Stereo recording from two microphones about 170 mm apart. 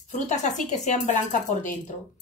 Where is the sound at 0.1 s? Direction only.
45° left (ahead or behind).